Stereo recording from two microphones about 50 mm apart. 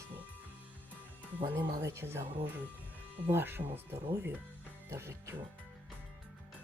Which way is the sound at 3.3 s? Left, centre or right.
Right.